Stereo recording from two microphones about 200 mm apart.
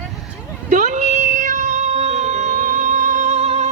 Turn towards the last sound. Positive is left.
turn(degrees=-35)  # may be behind; listen again after turning